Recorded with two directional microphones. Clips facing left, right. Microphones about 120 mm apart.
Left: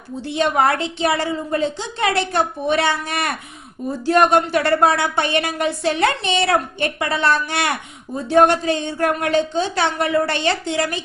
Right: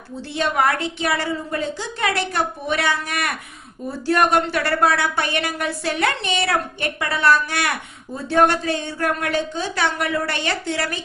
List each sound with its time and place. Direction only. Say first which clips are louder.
0.2 s a woman's voice: left 3 dB; 25° left (ahead or behind)